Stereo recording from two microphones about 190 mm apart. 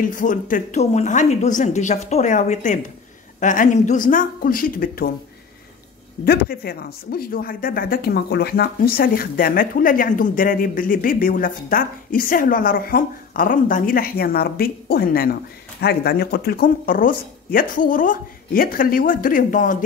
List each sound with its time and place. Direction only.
0.0 s a woman's voice: 45° left (ahead or behind)
6.2 s speech: 55° left (ahead or behind)